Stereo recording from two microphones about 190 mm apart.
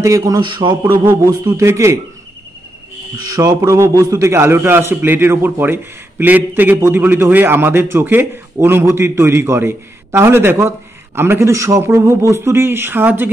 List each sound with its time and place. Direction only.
0.0 s a man's voice: 15° right (ahead or behind)
3.3 s a man's voice: 15° right (ahead or behind)